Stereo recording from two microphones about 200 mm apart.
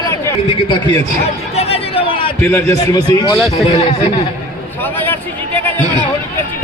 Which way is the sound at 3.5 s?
30° left (ahead or behind).